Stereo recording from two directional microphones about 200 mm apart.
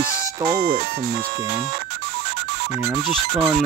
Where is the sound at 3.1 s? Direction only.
Centre (ahead or behind).